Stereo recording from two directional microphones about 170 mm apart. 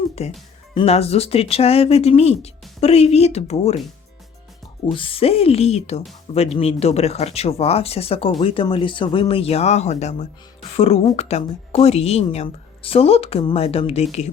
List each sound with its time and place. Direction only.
0.2 s speech: 35° left (ahead or behind)
4.9 s speech: 30° left (ahead or behind)